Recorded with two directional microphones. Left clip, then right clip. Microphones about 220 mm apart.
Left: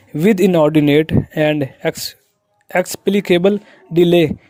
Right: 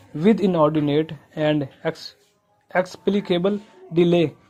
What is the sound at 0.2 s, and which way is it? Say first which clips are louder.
Speech: left 5 dB; 55° left (ahead or behind).